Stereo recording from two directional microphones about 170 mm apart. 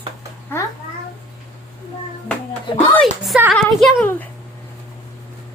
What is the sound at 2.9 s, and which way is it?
Speech, centre (ahead or behind).